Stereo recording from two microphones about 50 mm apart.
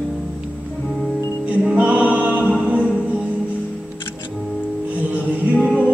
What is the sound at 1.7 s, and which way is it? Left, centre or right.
Music, right.